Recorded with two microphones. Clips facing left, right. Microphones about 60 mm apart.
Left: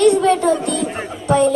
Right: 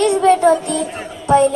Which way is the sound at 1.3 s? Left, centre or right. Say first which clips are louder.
Right 2 dB; right.